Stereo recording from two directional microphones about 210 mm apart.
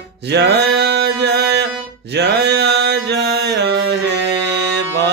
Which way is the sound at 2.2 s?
55° right (ahead or behind).